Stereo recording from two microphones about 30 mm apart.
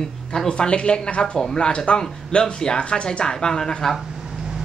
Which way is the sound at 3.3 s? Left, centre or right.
Left.